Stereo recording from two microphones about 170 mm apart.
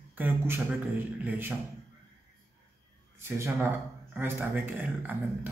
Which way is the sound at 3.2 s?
15° right (ahead or behind).